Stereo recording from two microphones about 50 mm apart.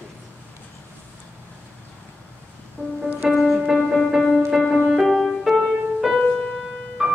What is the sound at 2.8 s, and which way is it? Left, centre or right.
Music, right.